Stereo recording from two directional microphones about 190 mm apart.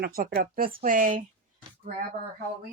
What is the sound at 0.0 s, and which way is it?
Speech, 50° right (ahead or behind).